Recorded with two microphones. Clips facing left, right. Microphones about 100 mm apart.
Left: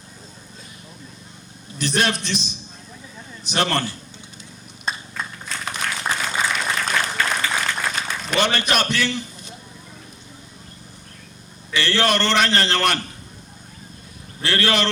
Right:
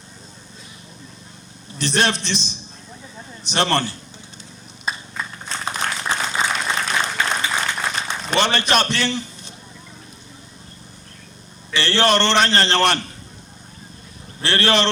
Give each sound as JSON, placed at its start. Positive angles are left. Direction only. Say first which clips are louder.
{"t": 1.8, "sound": "a man's voice", "louder": "right 1 dB", "side_deg": -30}
{"t": 4.9, "sound": "a sound", "louder": "right 1 dB", "side_deg": -5}
{"t": 5.5, "sound": "applause", "louder": "right 3 dB", "side_deg": -30}
{"t": 11.7, "sound": "a man's voice", "louder": "right 2 dB", "side_deg": -30}
{"t": 14.4, "sound": "a man's voice", "louder": "right 2 dB", "side_deg": -30}